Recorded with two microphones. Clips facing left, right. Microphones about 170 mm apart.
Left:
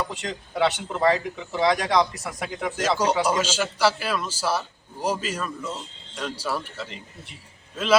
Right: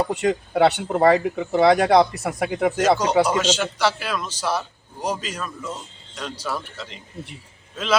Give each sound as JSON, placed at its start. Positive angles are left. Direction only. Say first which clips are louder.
{"t": 0.0, "sound": "speech", "louder": "right 9 dB", "side_deg": -55}
{"t": 3.2, "sound": "a man's voice", "louder": "right 2 dB", "side_deg": 10}